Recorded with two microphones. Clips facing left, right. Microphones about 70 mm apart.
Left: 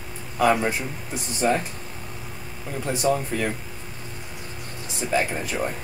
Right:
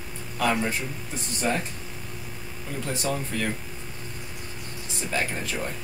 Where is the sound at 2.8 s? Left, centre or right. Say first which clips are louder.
Left 7 dB; centre.